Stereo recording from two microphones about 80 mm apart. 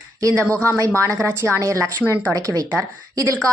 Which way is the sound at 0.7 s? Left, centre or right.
Right.